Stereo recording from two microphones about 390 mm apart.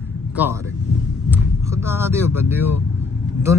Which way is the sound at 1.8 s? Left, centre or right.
Centre.